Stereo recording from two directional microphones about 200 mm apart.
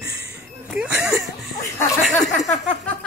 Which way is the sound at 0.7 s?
5° right (ahead or behind).